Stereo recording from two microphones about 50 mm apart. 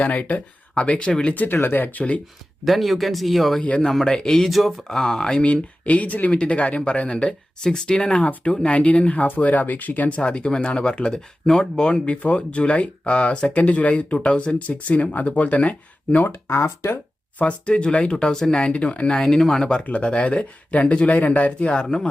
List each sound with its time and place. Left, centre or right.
0.0 s speech: left
1.2 s speech: left
2.6 s speech: centre
3.6 s speech: left
3.8 s speech: centre
4.9 s speech: centre
5.8 s speech: left
10.2 s speech: left
16.5 s speech: left
17.3 s speech: left
18.7 s speech: left
19.2 s speech: centre
19.8 s speech: left
21.9 s speech: centre